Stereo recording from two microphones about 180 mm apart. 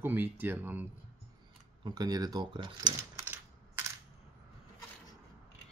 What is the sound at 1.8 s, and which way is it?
Speech, 20° right (ahead or behind).